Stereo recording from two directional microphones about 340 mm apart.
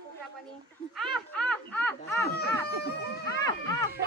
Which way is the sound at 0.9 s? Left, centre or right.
Centre.